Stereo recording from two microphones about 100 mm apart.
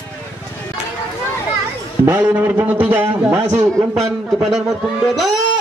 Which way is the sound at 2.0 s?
25° right (ahead or behind).